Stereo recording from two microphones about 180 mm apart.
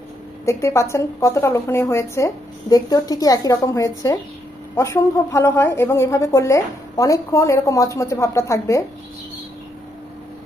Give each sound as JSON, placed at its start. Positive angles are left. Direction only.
{"t": 0.5, "sound": "a woman's voice", "side_deg": 15}